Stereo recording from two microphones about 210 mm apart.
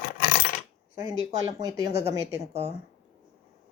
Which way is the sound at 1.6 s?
15° right (ahead or behind).